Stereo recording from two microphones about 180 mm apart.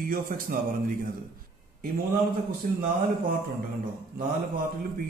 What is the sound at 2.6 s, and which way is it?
Speech, 55° right (ahead or behind).